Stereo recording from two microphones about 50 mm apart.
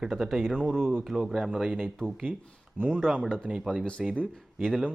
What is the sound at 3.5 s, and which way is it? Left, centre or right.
Speech, right.